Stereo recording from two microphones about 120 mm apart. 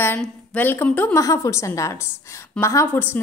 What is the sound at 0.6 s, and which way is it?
Speech, 15° left (ahead or behind).